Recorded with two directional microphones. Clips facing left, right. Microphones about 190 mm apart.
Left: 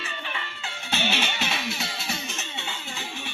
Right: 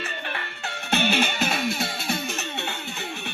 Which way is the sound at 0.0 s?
55° right (ahead or behind).